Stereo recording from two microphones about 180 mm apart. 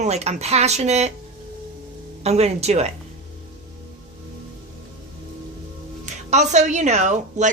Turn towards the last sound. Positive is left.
turn(degrees=-40)  # may be behind; listen again after turning